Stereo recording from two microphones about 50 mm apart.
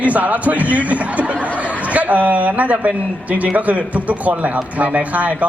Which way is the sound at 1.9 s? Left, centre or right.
Right.